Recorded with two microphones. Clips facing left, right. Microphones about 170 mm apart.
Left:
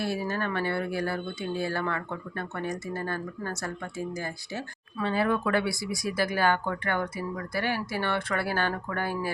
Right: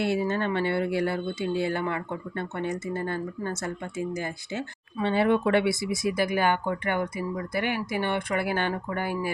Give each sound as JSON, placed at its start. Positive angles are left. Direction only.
{"t": 0.0, "sound": "speech", "side_deg": -25}